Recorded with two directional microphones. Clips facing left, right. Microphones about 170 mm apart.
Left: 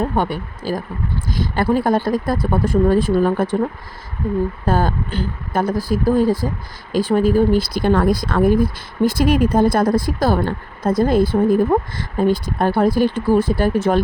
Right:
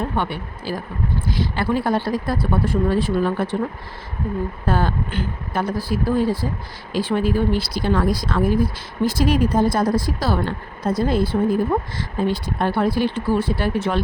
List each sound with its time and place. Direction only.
0.0 s speech: 45° left (ahead or behind)
4.6 s speech: 40° left (ahead or behind)